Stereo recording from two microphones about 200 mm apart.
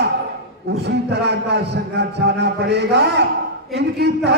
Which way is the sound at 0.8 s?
55° right (ahead or behind).